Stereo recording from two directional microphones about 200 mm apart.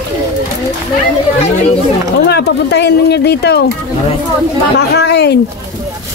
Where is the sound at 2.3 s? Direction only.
55° left (ahead or behind).